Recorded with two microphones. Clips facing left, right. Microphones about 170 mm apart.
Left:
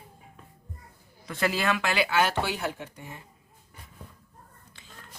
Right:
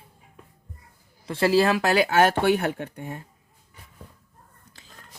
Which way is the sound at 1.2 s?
30° right (ahead or behind).